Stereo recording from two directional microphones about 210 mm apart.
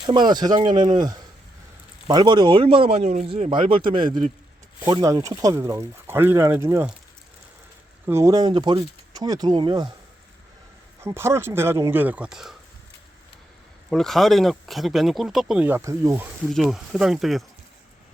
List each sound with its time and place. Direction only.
0.0 s speech: 20° right (ahead or behind)
2.0 s speech: 20° right (ahead or behind)
8.0 s speech: 15° right (ahead or behind)
11.0 s speech: 10° right (ahead or behind)
13.9 s speech: centre (ahead or behind)